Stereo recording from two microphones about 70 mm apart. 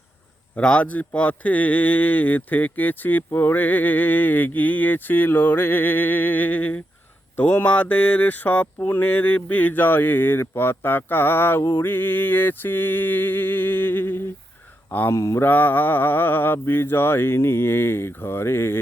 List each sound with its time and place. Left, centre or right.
0.5 s a man's voice: centre
15.1 s mantra: left
15.4 s speech: left